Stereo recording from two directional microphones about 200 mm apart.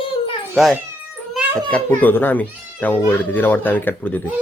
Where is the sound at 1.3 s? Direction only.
Centre (ahead or behind).